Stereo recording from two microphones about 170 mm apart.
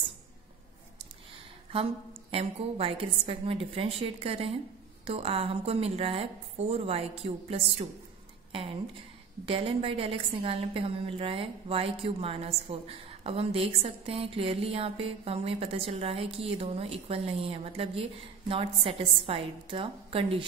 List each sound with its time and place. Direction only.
2.3 s a woman's voice: 35° right (ahead or behind)
9.5 s a woman's voice: 35° right (ahead or behind)